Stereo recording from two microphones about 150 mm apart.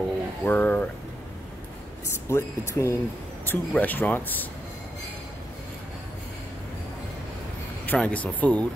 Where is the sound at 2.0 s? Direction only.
20° left (ahead or behind).